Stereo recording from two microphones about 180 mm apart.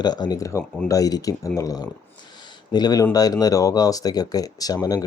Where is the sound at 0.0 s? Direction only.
25° left (ahead or behind).